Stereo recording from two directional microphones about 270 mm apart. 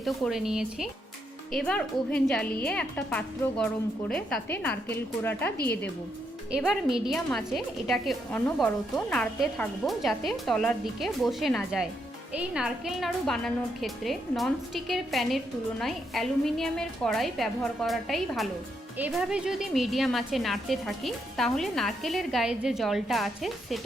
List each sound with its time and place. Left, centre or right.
0.0 s a woman's voice: centre